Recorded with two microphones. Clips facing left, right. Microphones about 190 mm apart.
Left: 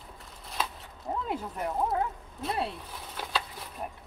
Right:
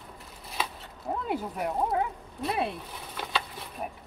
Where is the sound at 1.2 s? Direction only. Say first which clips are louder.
Right 4 dB; 5° right (ahead or behind).